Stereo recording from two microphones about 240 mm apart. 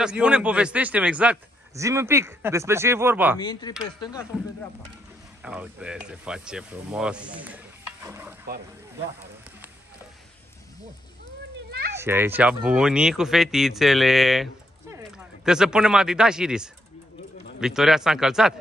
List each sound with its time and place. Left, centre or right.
0.0 s a man's voice: centre
3.3 s speech: centre
5.4 s speech: centre
11.9 s speech: centre